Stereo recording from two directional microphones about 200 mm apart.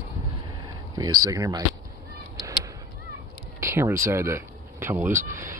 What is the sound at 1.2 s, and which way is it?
Speech, 15° right (ahead or behind).